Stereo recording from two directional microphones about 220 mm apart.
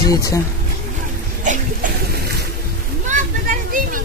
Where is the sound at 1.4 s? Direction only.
35° right (ahead or behind).